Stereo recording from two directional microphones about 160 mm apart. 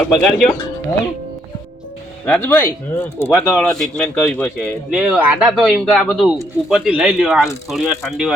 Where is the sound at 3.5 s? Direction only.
5° left (ahead or behind).